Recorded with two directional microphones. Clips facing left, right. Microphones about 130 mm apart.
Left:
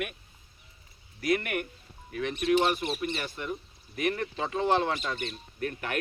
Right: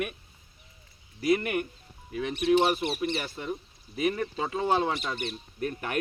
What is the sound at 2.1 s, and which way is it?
Speech, 25° right (ahead or behind).